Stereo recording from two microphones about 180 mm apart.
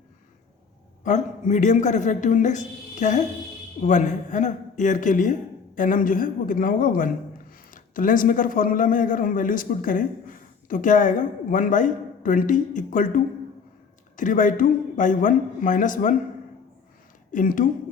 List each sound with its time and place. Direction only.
1.0 s a man's voice: 40° left (ahead or behind)
17.3 s a man's voice: 50° left (ahead or behind)